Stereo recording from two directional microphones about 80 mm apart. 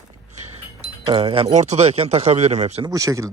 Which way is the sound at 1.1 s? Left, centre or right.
Right.